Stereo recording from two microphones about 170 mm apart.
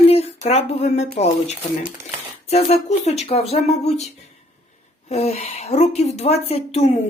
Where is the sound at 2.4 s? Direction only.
35° left (ahead or behind).